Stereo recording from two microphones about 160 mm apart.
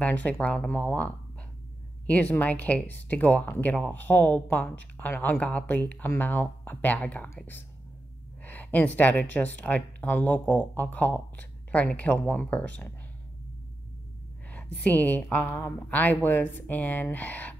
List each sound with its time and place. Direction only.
0.0 s speech: 10° left (ahead or behind)
14.8 s speech: 10° left (ahead or behind)